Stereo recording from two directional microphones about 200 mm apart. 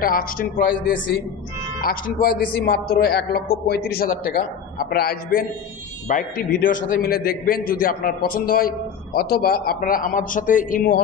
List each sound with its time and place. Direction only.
0.0 s a man's voice: 45° left (ahead or behind)